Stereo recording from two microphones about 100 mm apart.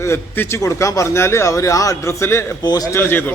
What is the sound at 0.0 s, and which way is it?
Speech, 25° left (ahead or behind).